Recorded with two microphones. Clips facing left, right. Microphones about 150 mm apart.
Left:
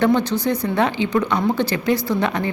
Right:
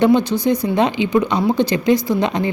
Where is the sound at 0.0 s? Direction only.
15° right (ahead or behind).